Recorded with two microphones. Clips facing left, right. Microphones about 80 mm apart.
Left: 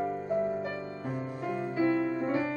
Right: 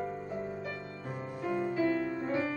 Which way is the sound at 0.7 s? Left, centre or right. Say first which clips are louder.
Left 5 dB; centre.